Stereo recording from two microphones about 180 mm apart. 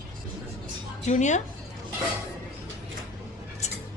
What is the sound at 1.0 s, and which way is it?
Speech, 40° left (ahead or behind).